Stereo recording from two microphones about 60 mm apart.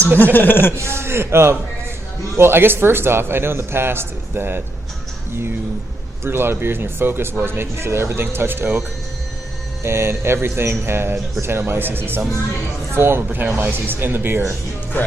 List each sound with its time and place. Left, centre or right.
0.3 s speech: left
0.8 s speech: right
6.2 s speech: right
9.8 s speech: right